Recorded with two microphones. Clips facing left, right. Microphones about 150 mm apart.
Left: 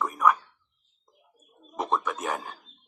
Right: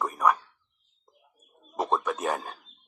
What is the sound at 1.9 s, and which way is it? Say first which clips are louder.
Speech: right 1 dB; 20° right (ahead or behind).